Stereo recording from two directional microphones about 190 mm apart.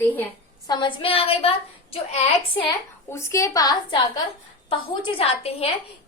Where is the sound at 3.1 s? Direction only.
15° left (ahead or behind).